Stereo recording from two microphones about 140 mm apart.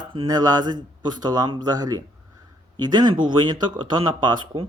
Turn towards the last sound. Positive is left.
turn(degrees=-35)  # may be behind; listen again after turning